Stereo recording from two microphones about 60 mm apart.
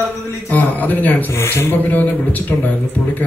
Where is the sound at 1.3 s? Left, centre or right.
Left.